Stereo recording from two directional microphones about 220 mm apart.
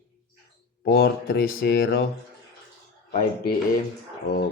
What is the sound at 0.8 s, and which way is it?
Speech, 45° left (ahead or behind).